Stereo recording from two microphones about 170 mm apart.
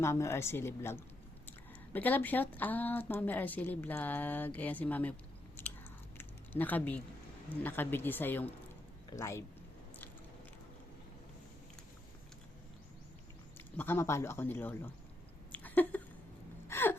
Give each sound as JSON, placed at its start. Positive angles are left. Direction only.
{"t": 0.0, "sound": "speech", "side_deg": 15}
{"t": 5.6, "sound": "biting", "side_deg": 10}
{"t": 6.1, "sound": "a sound", "side_deg": 10}
{"t": 7.6, "sound": "speech", "side_deg": 10}
{"t": 13.7, "sound": "speech", "side_deg": 15}
{"t": 15.5, "sound": "a sound", "side_deg": 10}
{"t": 16.6, "sound": "gasp", "side_deg": 15}